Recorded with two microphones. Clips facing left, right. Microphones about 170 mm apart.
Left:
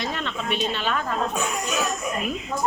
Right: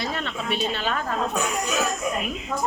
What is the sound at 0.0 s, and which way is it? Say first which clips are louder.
A woman's voice: even; 35° right (ahead or behind).